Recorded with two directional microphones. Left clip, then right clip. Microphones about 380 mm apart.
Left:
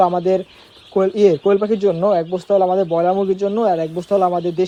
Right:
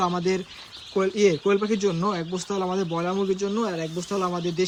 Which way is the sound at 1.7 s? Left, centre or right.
Centre.